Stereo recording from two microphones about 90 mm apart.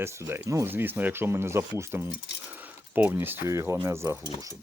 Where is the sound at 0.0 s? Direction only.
25° right (ahead or behind).